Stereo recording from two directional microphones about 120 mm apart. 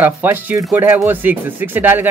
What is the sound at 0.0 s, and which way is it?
Speech, 15° right (ahead or behind).